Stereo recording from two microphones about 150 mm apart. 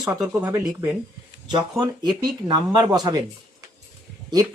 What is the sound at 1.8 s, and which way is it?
Speech, 25° right (ahead or behind).